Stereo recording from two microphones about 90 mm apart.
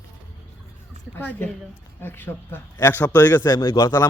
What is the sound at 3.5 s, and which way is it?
Speech, 35° left (ahead or behind).